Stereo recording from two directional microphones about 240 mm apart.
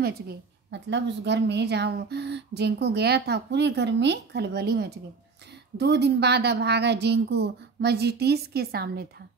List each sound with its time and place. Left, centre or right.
0.7 s speech: right